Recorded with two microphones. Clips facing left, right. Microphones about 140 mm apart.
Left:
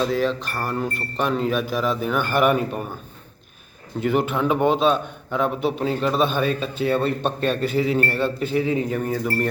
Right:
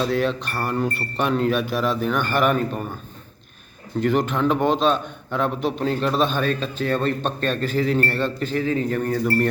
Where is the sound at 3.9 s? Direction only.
5° left (ahead or behind).